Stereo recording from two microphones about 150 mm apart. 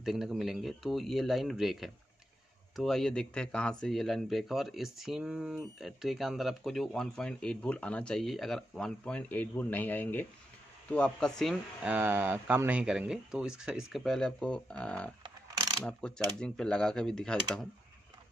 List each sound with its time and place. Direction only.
0.0 s speech: centre (ahead or behind)
15.2 s ratchet: 25° right (ahead or behind)
15.8 s speech: 5° left (ahead or behind)